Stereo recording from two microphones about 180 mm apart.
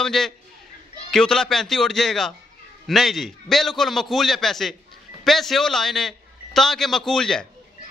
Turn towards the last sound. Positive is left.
turn(degrees=5)  # may be behind; listen again after turning